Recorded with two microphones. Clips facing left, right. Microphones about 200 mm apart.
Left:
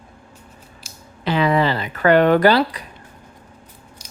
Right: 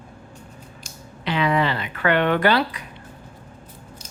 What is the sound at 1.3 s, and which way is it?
Speech, 35° left (ahead or behind).